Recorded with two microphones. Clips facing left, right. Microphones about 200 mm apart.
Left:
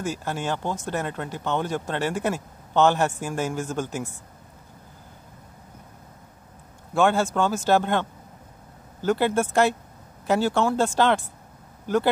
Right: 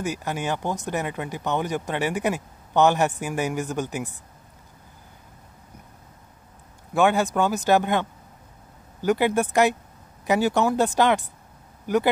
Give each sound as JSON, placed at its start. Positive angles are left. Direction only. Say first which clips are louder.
{"t": 0.0, "sound": "speech", "louder": "right 1 dB", "side_deg": -15}
{"t": 6.9, "sound": "speech", "louder": "right 1 dB", "side_deg": -15}